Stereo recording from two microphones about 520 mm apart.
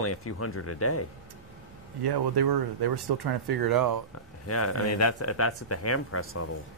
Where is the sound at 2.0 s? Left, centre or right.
Right.